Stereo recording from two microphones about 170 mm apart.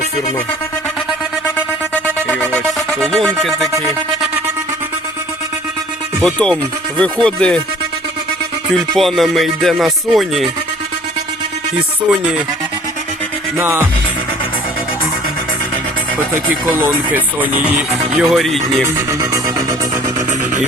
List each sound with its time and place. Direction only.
2.1 s music: 5° left (ahead or behind)
6.1 s music: 5° left (ahead or behind)
8.7 s music: centre (ahead or behind)
13.6 s speech: 15° right (ahead or behind)
16.7 s speech: 10° right (ahead or behind)
18.2 s music: centre (ahead or behind)
19.2 s music: 20° right (ahead or behind)